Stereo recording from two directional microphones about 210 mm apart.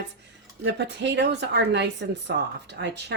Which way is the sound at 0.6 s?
55° right (ahead or behind).